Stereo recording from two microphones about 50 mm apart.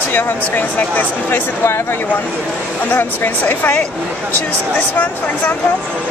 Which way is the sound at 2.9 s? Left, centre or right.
Left.